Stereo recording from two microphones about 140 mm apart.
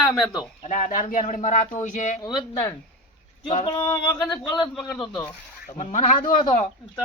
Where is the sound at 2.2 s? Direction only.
30° left (ahead or behind).